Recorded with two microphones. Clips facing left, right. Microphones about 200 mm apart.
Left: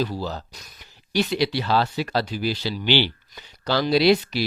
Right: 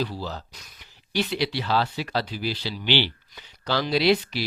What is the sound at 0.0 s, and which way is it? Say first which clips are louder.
Speech: left 3 dB; 45° left (ahead or behind).